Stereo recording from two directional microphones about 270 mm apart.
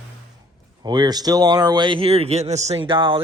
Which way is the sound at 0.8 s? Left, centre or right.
Centre.